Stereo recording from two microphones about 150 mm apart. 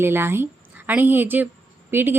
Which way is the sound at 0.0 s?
15° right (ahead or behind).